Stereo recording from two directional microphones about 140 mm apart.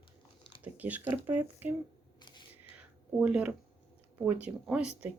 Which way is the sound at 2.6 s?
10° right (ahead or behind).